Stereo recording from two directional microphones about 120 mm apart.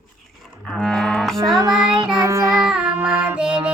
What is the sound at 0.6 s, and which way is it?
Cattle, 5° left (ahead or behind).